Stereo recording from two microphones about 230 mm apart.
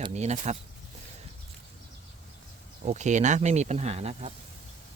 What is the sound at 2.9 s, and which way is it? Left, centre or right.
Speech, right.